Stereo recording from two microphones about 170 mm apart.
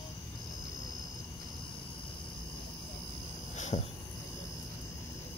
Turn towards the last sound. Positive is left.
turn(degrees=40)  # may be behind; listen again after turning